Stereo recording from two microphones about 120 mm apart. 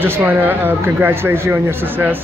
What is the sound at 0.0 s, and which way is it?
Speech, 15° right (ahead or behind).